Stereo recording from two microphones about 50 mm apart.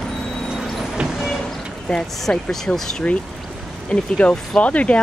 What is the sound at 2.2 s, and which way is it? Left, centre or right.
Speech, centre.